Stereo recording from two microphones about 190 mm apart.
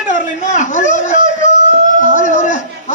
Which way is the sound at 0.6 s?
40° left (ahead or behind).